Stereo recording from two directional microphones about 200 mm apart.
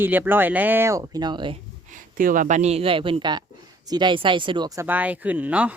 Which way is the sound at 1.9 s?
40° right (ahead or behind).